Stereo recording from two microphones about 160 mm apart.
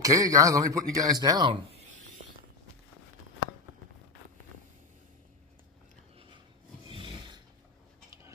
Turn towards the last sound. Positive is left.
turn(degrees=-30)  # may be behind; listen again after turning